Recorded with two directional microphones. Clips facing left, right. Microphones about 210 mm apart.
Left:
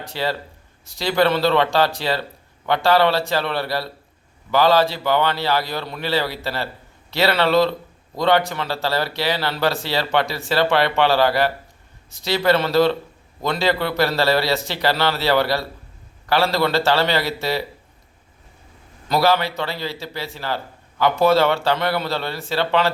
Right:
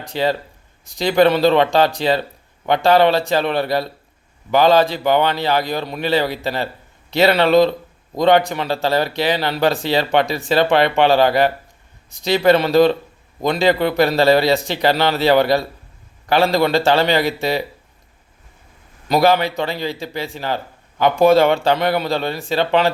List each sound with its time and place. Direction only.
0.1 s a man's voice: 20° right (ahead or behind)
19.0 s a man's voice: 15° right (ahead or behind)